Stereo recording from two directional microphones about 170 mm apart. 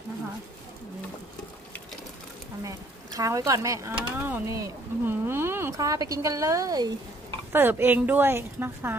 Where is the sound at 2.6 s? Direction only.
20° right (ahead or behind).